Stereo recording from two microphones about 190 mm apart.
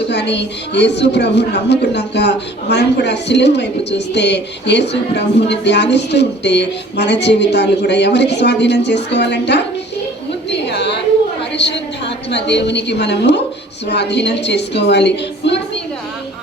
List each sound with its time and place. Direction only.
0.1 s a woman's voice: 65° left (ahead or behind)
10.5 s a sound: 65° left (ahead or behind)
13.8 s a woman's voice: 65° left (ahead or behind)